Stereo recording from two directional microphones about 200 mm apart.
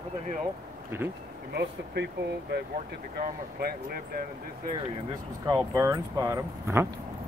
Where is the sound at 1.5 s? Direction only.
55° right (ahead or behind).